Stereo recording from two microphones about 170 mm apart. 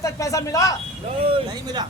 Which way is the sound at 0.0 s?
20° left (ahead or behind).